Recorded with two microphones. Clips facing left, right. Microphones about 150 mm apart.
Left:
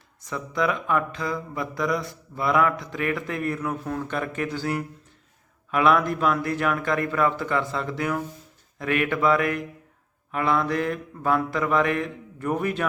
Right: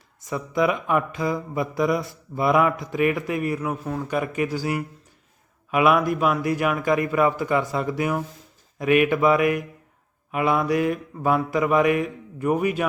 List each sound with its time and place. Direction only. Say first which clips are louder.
0.3 s speech: right 3 dB; 20° right (ahead or behind)
2.8 s mantra: right 5 dB; 20° right (ahead or behind)